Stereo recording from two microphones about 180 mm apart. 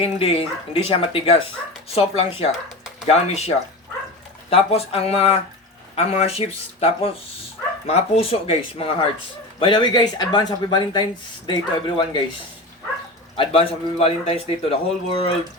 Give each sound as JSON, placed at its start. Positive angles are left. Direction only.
{"t": 0.0, "sound": "a man's voice", "side_deg": 30}
{"t": 13.3, "sound": "a man's voice", "side_deg": 30}